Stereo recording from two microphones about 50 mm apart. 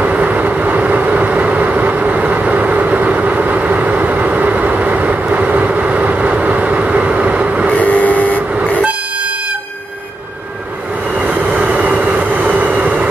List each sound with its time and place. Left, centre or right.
0.0 s vehicle: right
7.7 s vehicle: left
11.2 s vehicle: right